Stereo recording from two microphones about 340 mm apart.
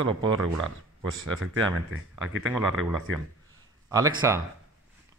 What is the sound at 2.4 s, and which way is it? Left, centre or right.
Speech, centre.